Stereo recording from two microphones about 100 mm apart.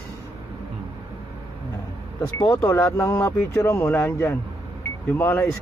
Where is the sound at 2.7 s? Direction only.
30° left (ahead or behind).